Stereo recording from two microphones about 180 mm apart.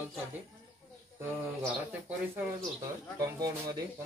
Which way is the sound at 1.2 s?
10° right (ahead or behind).